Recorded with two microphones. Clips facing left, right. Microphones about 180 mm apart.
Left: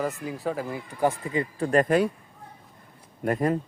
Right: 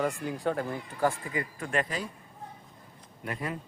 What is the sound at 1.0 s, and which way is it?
Speech, 20° left (ahead or behind).